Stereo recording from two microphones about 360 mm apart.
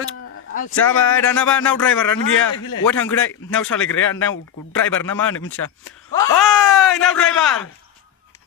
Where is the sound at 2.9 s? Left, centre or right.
Centre.